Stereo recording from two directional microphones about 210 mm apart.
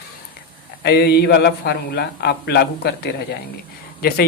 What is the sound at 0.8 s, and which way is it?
A man's voice, 50° left (ahead or behind).